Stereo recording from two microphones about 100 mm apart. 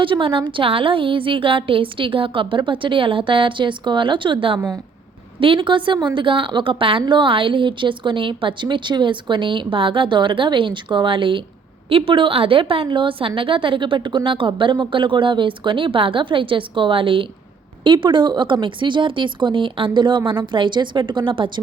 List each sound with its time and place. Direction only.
0.0 s a woman's voice: 60° right (ahead or behind)